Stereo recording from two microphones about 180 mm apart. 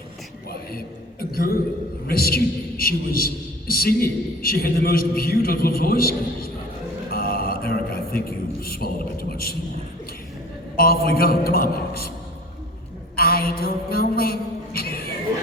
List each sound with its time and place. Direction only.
1.2 s a sound: 55° left (ahead or behind)
2.0 s a man's voice: 60° left (ahead or behind)
7.1 s mantra: 55° left (ahead or behind)
8.6 s a man's voice: 55° left (ahead or behind)
10.8 s a man's voice: 55° left (ahead or behind)
13.1 s a sound: 55° left (ahead or behind)